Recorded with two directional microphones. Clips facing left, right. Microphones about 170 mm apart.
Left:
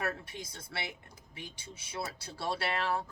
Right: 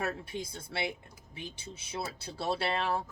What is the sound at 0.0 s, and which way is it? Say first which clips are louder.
Speech: right 2 dB; 25° right (ahead or behind).